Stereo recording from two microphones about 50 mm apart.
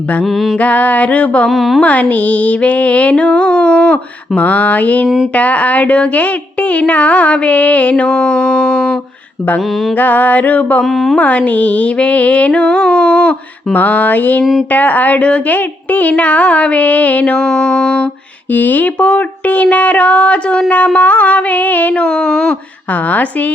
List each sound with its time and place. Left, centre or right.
0.6 s female singing: left
1.5 s a woman's voice: centre
1.8 s female singing: left
10.0 s a sound: left
10.8 s a woman's voice: centre
11.2 s female singing: left
13.7 s a sound: left
17.4 s music: centre
18.5 s a sound: left